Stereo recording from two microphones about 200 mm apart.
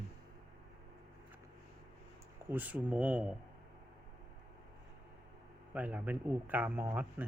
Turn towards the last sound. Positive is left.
turn(degrees=-10)  # may be behind; listen again after turning